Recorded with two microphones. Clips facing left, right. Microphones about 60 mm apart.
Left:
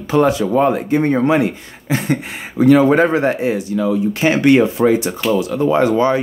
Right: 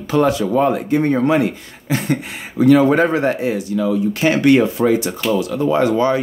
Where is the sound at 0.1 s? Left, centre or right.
Left.